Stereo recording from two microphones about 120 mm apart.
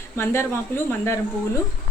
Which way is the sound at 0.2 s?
20° left (ahead or behind).